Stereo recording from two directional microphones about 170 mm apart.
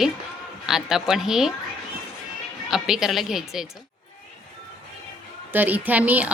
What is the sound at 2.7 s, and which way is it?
Speech, 5° right (ahead or behind).